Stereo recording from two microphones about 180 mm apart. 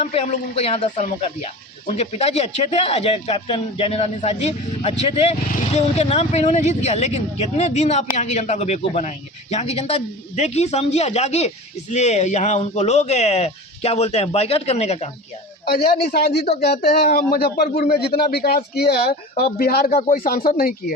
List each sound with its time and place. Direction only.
0.0 s speech: 35° left (ahead or behind)
15.6 s speech: 55° left (ahead or behind)
17.0 s speech: 50° left (ahead or behind)